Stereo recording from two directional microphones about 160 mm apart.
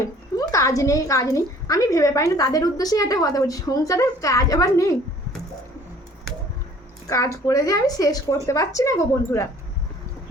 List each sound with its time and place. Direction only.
0.0 s a woman's voice: 20° left (ahead or behind)
7.1 s a woman's voice: 20° left (ahead or behind)